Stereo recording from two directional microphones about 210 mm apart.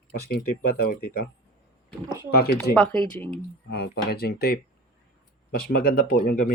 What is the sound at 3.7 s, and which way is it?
Speech, 50° left (ahead or behind).